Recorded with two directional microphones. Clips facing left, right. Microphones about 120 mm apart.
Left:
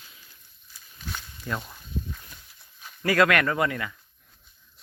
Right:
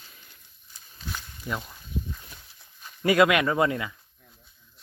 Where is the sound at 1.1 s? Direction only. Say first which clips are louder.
Even; 10° right (ahead or behind).